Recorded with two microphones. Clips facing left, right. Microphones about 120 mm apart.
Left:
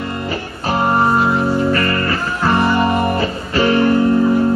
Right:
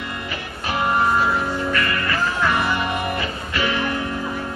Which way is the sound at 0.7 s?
35° left (ahead or behind).